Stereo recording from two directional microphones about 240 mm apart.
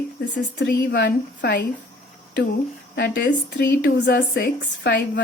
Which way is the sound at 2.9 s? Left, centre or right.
Left.